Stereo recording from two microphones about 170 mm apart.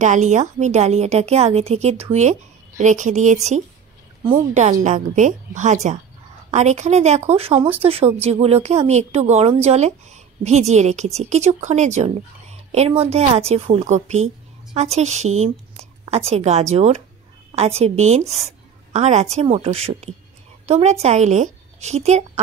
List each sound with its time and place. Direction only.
0.0 s a woman's voice: 45° right (ahead or behind)
4.6 s a woman's voice: 45° right (ahead or behind)